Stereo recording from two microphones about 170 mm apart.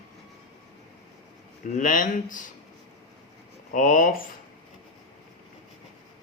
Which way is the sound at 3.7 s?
50° left (ahead or behind).